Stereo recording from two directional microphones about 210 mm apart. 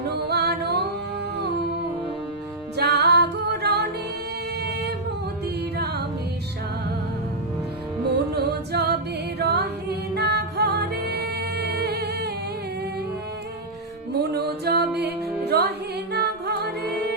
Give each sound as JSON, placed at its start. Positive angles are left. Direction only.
{"t": 0.3, "sound": "music", "side_deg": -50}
{"t": 2.7, "sound": "music", "side_deg": -50}
{"t": 5.7, "sound": "music", "side_deg": -50}
{"t": 8.1, "sound": "music", "side_deg": -50}
{"t": 14.1, "sound": "music", "side_deg": -50}